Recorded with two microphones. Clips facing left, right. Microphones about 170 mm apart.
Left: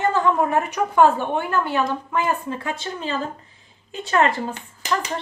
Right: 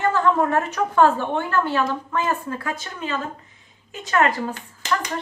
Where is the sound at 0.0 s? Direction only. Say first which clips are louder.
Even; 15° left (ahead or behind).